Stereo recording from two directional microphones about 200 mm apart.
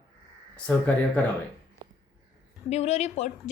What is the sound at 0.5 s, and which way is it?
Speech, 5° left (ahead or behind).